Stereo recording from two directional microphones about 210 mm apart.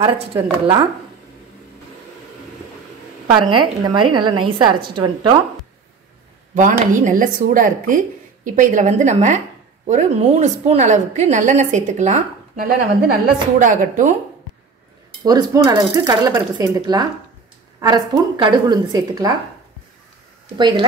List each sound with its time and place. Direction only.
0.0 s a woman's voice: 20° right (ahead or behind)
3.3 s a woman's voice: 20° right (ahead or behind)
6.5 s a woman's voice: 40° right (ahead or behind)
15.2 s a woman's voice: 15° right (ahead or behind)
20.5 s a woman's voice: 20° right (ahead or behind)